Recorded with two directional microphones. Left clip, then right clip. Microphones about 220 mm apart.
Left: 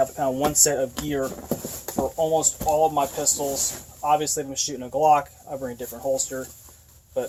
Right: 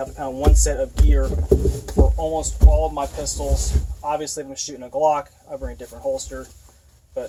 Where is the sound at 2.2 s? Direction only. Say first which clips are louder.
Left 2 dB; 35° left (ahead or behind).